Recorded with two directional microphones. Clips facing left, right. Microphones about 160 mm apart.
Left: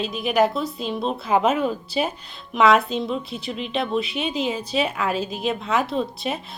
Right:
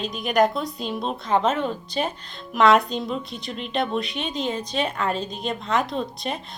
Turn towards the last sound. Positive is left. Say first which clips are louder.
# left 3 dB
turn(degrees=5)  # may be behind; listen again after turning